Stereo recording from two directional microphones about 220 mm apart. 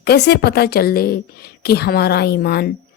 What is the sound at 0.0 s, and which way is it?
A woman's voice, 45° left (ahead or behind).